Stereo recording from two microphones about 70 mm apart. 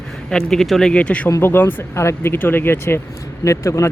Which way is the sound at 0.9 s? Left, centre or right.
Centre.